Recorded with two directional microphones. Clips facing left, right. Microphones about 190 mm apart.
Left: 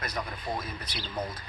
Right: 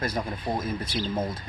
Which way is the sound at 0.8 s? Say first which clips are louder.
Right 10 dB; 45° right (ahead or behind).